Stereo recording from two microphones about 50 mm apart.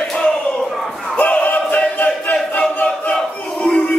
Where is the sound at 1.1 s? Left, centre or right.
Left.